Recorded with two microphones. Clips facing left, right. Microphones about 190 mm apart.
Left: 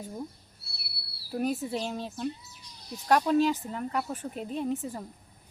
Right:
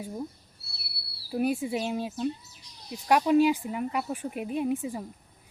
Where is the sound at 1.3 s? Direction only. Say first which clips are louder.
Right 2 dB; 10° right (ahead or behind).